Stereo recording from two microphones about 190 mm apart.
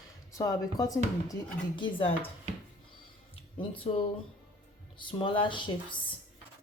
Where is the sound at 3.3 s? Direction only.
30° left (ahead or behind).